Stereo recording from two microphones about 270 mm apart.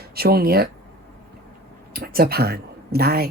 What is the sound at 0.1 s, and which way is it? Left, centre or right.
Speech, right.